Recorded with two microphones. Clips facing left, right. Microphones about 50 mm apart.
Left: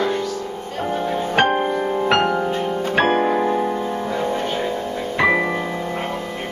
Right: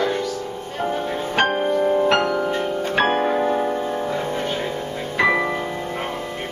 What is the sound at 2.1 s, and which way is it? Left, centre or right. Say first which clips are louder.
Music: left 1 dB; left.